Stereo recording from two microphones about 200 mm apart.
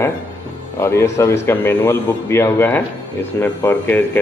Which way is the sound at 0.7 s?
15° left (ahead or behind).